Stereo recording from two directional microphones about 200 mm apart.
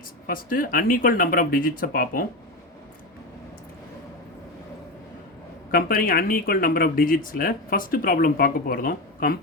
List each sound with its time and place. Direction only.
0.3 s speech: 45° left (ahead or behind)
5.7 s speech: 45° left (ahead or behind)